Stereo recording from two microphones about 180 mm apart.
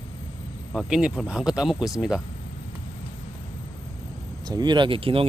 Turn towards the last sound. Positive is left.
turn(degrees=-30)  # may be behind; listen again after turning